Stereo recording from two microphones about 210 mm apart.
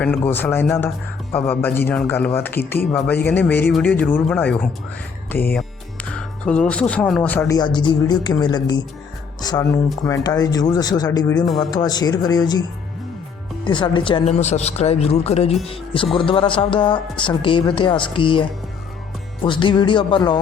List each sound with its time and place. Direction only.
0.3 s speech: 10° left (ahead or behind)
13.7 s speech: 20° left (ahead or behind)